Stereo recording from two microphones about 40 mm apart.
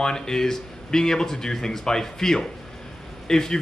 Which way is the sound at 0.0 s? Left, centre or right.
Centre.